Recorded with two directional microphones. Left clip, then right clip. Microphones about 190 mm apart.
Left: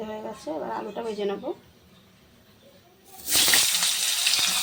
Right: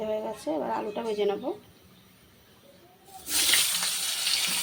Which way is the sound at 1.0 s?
Centre (ahead or behind).